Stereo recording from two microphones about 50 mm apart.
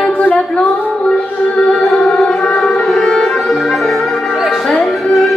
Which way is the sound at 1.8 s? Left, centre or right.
Centre.